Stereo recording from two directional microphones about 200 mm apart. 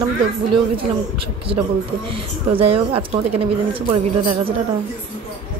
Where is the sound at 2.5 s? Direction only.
30° right (ahead or behind).